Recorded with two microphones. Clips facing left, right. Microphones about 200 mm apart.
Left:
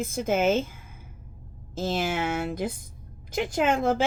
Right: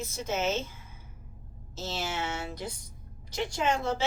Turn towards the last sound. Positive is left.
turn(degrees=50)  # may be behind; listen again after turning